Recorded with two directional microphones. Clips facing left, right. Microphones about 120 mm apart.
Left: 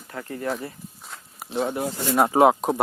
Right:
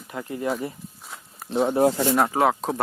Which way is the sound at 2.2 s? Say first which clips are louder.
Left 4 dB; 25° left (ahead or behind).